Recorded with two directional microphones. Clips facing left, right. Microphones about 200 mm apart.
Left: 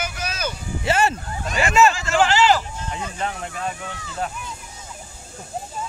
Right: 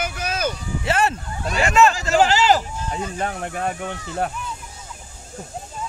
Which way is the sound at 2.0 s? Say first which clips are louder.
Right 1 dB; 40° right (ahead or behind).